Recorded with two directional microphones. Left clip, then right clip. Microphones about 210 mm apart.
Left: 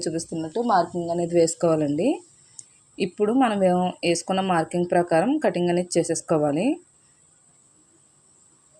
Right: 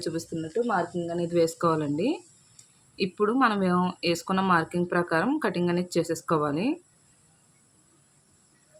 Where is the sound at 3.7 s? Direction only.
40° right (ahead or behind).